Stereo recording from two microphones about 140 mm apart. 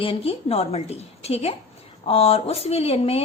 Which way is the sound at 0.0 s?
40° left (ahead or behind).